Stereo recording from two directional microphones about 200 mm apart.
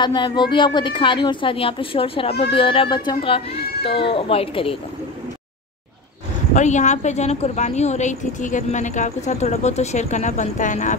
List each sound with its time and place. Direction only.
0.0 s a woman's voice: 20° left (ahead or behind)
6.5 s a woman's voice: 35° left (ahead or behind)